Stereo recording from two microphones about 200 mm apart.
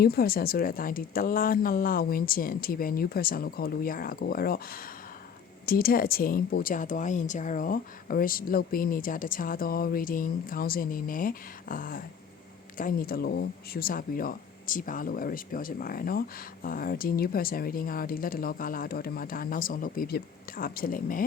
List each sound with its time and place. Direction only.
0.0 s speech: 50° left (ahead or behind)